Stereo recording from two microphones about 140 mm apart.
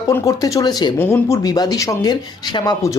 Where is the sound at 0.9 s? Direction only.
15° left (ahead or behind).